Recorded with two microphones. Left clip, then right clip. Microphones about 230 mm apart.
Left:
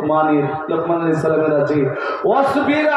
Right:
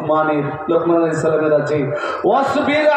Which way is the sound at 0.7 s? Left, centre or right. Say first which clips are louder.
Right 6 dB; right.